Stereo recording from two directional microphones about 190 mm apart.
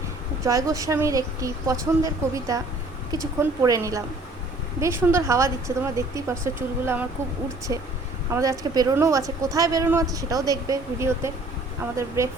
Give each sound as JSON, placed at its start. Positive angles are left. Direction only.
{"t": 0.4, "sound": "a woman's voice", "side_deg": -15}
{"t": 3.6, "sound": "a woman's voice", "side_deg": -15}
{"t": 8.3, "sound": "a woman's voice", "side_deg": -15}